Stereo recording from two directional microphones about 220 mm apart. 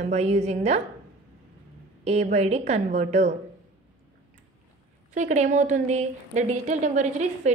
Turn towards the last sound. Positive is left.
turn(degrees=-30)  # may be behind; listen again after turning